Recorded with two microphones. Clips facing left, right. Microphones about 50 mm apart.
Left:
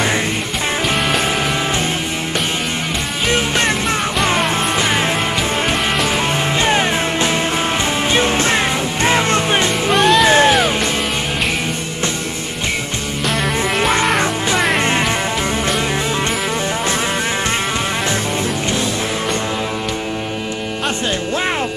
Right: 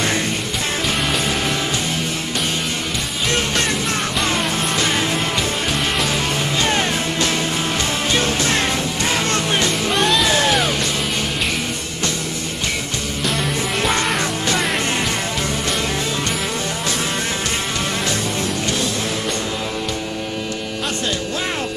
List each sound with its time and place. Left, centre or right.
3.3 s music: left
4.7 s music: left
6.6 s music: left
9.9 s music: centre
10.2 s music: left